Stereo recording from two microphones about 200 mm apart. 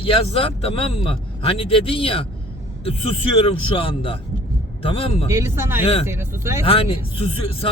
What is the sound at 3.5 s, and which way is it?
Speech, 25° left (ahead or behind).